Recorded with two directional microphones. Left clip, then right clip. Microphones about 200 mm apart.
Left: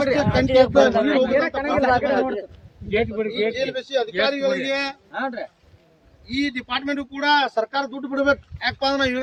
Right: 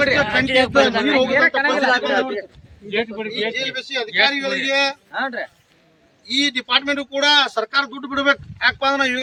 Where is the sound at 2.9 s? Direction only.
50° left (ahead or behind).